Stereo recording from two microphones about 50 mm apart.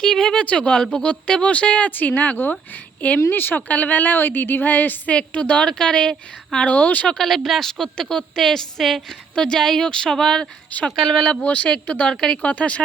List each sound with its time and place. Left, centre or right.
0.0 s a woman's voice: centre; by 2.6 s left
3.2 s a woman's voice: left; by 6.7 s centre
6.7 s a woman's voice: left
7.1 s a woman's voice: centre
9.3 s a woman's voice: centre
10.7 s speech: left
10.9 s a woman's voice: centre
12.5 s speech: left